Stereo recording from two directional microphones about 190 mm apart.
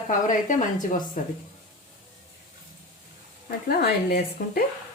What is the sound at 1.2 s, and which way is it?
Speech, 45° left (ahead or behind).